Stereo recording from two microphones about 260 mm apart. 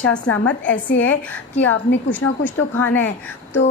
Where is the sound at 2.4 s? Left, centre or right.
Left.